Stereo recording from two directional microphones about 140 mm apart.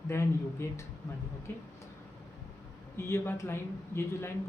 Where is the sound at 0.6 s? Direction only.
20° left (ahead or behind).